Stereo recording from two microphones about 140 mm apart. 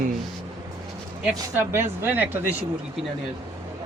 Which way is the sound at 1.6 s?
15° right (ahead or behind).